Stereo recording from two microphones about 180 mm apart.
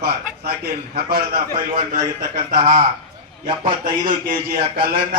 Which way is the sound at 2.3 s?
25° right (ahead or behind).